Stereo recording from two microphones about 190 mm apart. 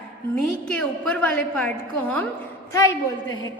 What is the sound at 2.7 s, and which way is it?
Speech, 15° left (ahead or behind).